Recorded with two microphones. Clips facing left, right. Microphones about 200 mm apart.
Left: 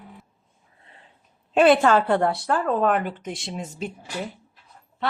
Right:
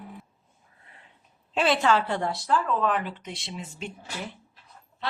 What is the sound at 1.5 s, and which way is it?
A woman's voice, 55° left (ahead or behind).